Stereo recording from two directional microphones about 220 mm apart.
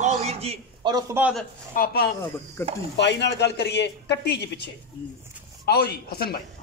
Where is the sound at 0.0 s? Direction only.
30° right (ahead or behind).